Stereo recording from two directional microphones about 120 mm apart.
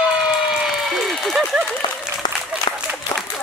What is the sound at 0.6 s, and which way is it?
Applause, centre (ahead or behind).